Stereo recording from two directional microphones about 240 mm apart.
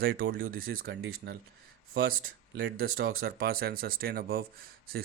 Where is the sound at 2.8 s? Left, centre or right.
Right.